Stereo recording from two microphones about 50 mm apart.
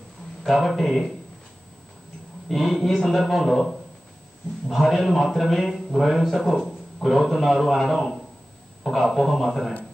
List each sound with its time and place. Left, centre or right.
0.4 s a man's voice: centre
2.4 s a man's voice: centre